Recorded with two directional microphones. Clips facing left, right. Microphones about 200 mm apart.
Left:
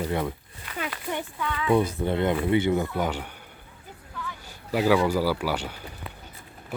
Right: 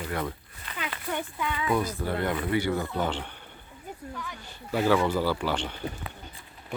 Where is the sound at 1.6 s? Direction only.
30° left (ahead or behind); by 3.3 s 10° left (ahead or behind).